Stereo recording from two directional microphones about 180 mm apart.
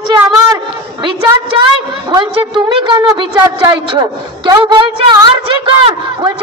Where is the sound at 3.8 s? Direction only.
25° right (ahead or behind).